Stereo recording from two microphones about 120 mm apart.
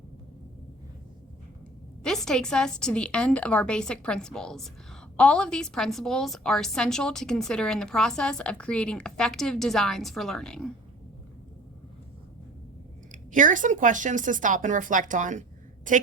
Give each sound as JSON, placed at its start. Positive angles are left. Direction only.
{"t": 2.0, "sound": "a woman's voice", "side_deg": 5}
{"t": 13.1, "sound": "speech", "side_deg": -90}